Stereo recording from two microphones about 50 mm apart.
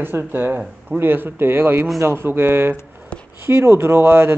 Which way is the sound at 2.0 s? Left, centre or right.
Right.